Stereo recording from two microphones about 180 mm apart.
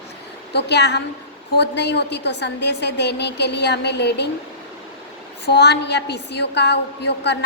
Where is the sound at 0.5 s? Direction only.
70° left (ahead or behind).